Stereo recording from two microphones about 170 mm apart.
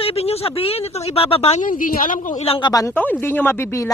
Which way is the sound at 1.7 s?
55° left (ahead or behind).